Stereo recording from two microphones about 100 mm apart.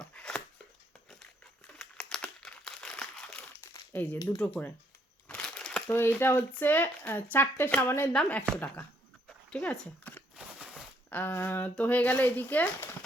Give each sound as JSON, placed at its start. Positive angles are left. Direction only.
{"t": 0.0, "sound": "a sound", "side_deg": 10}
{"t": 1.6, "sound": "crumpling", "side_deg": 5}
{"t": 3.9, "sound": "speech", "side_deg": 20}
{"t": 5.3, "sound": "crushing", "side_deg": 5}
{"t": 5.9, "sound": "speech", "side_deg": 25}
{"t": 8.1, "sound": "speech", "side_deg": 10}
{"t": 9.5, "sound": "a sound", "side_deg": 15}
{"t": 11.1, "sound": "speech", "side_deg": 20}